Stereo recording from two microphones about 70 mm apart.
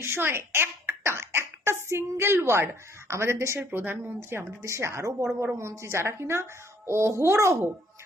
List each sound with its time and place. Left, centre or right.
0.0 s a child's voice: right
3.6 s a child's voice: right